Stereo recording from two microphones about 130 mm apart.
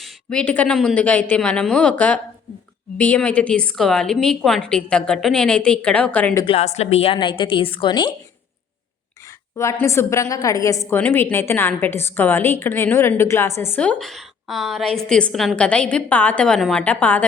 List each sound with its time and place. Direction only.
0.0 s a woman's voice: 5° left (ahead or behind)
6.4 s a woman's voice: 50° left (ahead or behind)
7.2 s a woman's voice: 35° left (ahead or behind)
9.2 s a sound: 25° left (ahead or behind)
9.8 s a woman's voice: 20° left (ahead or behind)